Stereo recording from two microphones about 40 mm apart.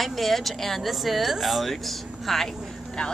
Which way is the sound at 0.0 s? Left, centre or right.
Centre.